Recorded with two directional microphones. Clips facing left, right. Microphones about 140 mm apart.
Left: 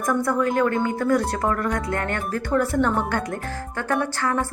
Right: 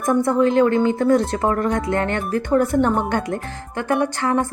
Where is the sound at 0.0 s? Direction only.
25° right (ahead or behind).